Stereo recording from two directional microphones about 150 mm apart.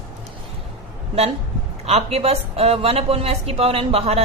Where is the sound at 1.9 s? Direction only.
45° right (ahead or behind).